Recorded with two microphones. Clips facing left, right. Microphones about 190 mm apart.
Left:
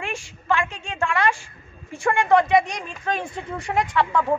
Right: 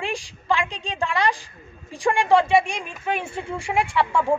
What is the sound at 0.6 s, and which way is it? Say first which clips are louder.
A woman's voice: even; 15° right (ahead or behind).